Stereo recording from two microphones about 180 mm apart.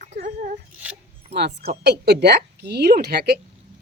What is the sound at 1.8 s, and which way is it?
Speech, 65° right (ahead or behind).